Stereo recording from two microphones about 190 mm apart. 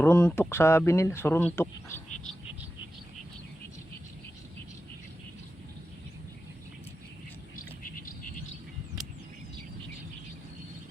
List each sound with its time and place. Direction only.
0.0 s speech: 10° left (ahead or behind)
7.9 s bird: 45° left (ahead or behind)